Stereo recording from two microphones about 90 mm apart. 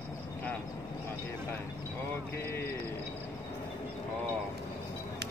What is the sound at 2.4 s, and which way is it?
Speech, 30° left (ahead or behind).